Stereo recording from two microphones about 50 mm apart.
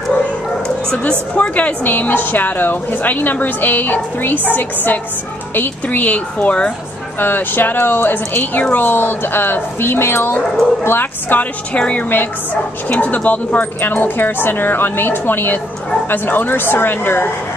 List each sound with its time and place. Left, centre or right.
1.3 s speech: left
1.9 s a woman's voice: left
7.2 s a woman's voice: left
11.7 s a woman's voice: left